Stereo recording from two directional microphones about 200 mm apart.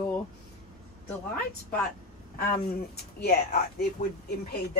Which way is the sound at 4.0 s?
35° left (ahead or behind).